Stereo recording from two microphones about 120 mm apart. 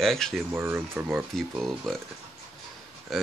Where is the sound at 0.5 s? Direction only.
20° right (ahead or behind).